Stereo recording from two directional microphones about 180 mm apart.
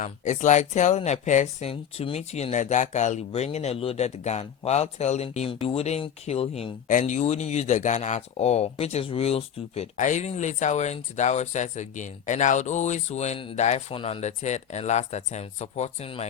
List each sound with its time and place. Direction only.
0.0 s speech: 40° left (ahead or behind)
1.7 s speech: 30° left (ahead or behind)
6.8 s speech: 45° left (ahead or behind)